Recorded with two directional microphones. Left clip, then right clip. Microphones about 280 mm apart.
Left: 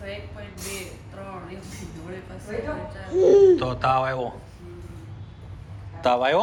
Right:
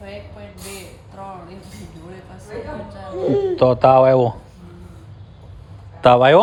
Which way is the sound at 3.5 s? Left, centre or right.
Right.